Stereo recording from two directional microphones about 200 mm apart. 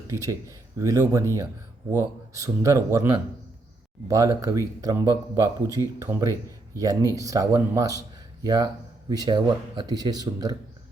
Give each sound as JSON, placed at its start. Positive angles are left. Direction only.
{"t": 0.1, "sound": "speech", "side_deg": -15}